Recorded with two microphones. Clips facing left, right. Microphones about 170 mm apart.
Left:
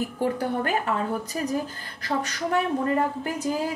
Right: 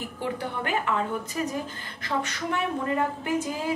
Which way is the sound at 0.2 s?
40° left (ahead or behind).